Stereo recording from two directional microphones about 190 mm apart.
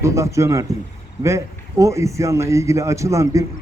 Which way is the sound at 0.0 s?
15° right (ahead or behind).